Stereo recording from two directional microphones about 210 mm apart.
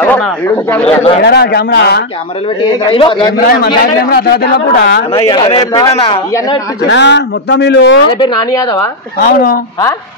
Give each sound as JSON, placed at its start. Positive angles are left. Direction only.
{"t": 0.0, "sound": "speech", "side_deg": 5}
{"t": 0.8, "sound": "a man's voice", "side_deg": 25}
{"t": 1.2, "sound": "a man's voice", "side_deg": 50}
{"t": 2.8, "sound": "a man's voice", "side_deg": 25}
{"t": 3.4, "sound": "a man's voice", "side_deg": 45}
{"t": 5.1, "sound": "a man's voice", "side_deg": 25}
{"t": 6.9, "sound": "speech", "side_deg": 55}
{"t": 8.2, "sound": "a man's voice", "side_deg": 20}
{"t": 9.2, "sound": "a man's voice", "side_deg": 45}